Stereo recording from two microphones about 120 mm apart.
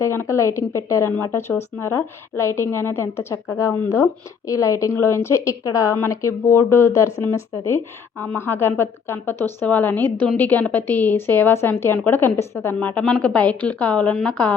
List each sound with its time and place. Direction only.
0.0 s a woman's voice: 20° left (ahead or behind)